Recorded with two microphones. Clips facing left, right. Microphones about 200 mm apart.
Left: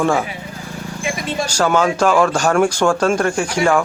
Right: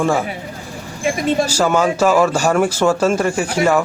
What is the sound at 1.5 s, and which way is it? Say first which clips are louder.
Speech: even; 5° right (ahead or behind).